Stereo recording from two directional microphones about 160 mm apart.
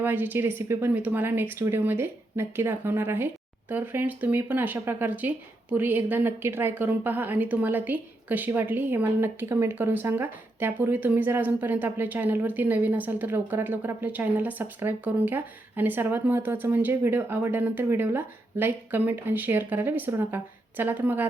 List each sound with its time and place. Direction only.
0.0 s a woman's voice: 10° right (ahead or behind)